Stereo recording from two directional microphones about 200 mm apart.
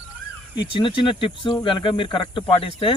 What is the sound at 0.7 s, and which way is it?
Speech, 25° left (ahead or behind).